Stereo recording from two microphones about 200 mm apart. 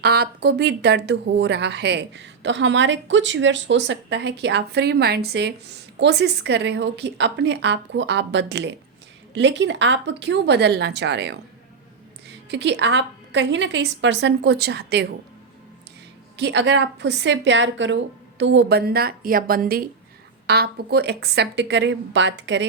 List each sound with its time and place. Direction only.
0.0 s a woman's voice: 55° right (ahead or behind)
16.4 s a woman's voice: 60° right (ahead or behind)